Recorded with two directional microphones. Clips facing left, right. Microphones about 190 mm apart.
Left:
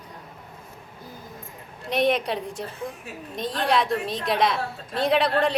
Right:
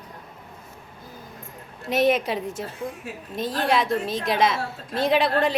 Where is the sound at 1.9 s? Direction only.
5° right (ahead or behind).